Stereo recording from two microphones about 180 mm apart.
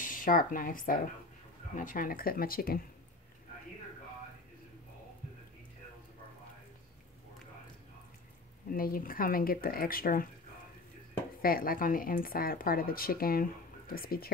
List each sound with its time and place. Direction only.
0.0 s speech: 50° left (ahead or behind)
8.6 s speech: 55° left (ahead or behind)
11.4 s speech: 55° left (ahead or behind)